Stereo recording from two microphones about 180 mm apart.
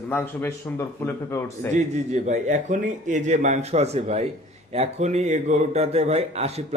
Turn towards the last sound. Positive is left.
turn(degrees=-35)  # may be behind; listen again after turning